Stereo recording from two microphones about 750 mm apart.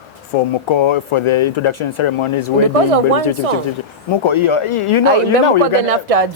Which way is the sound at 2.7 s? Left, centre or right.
Right.